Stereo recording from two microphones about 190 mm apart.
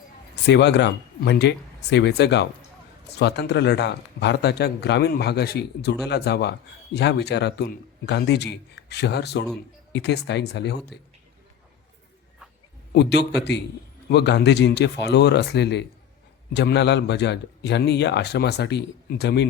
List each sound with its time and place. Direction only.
0.4 s a man's voice: 65° left (ahead or behind)
12.9 s a man's voice: 60° left (ahead or behind)